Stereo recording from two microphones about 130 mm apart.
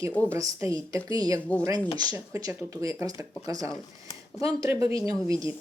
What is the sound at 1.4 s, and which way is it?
Speech, 10° left (ahead or behind).